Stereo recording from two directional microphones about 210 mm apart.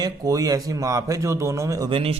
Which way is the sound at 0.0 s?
15° right (ahead or behind).